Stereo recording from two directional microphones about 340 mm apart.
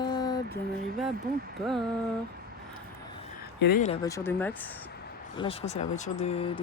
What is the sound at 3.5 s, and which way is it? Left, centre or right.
Speech, left.